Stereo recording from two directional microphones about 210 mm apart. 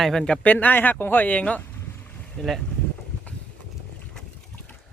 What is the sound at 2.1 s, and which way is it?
Boat, centre (ahead or behind).